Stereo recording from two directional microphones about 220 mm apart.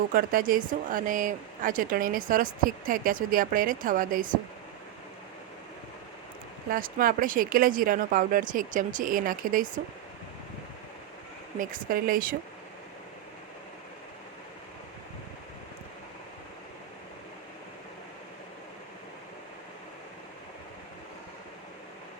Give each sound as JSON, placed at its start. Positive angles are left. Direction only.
{"t": 0.1, "sound": "speech", "side_deg": -40}
{"t": 6.7, "sound": "speech", "side_deg": -40}
{"t": 11.6, "sound": "speech", "side_deg": -40}